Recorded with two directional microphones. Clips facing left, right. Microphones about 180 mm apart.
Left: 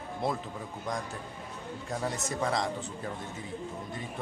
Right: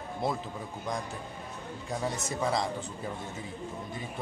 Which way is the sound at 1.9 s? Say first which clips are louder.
Even; 5° right (ahead or behind).